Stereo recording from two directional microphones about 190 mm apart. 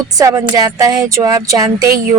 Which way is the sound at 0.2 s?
20° right (ahead or behind).